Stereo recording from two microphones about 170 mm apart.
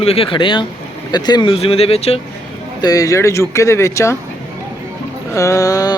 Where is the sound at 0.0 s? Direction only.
35° left (ahead or behind).